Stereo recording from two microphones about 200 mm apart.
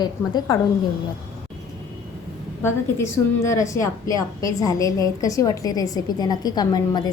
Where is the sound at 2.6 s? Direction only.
15° left (ahead or behind).